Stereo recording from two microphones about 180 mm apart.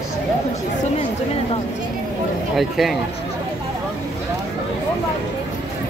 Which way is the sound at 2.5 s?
Centre (ahead or behind).